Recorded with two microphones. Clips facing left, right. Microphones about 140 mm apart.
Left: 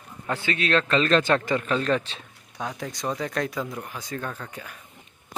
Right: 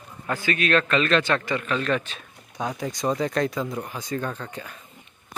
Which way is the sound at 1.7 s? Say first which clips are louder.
Right 1 dB; 30° left (ahead or behind).